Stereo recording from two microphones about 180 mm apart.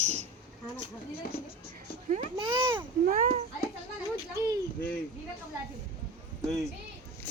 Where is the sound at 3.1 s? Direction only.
50° right (ahead or behind).